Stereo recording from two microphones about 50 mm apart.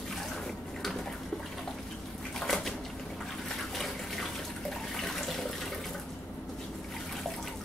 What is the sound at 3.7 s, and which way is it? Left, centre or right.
Water, centre.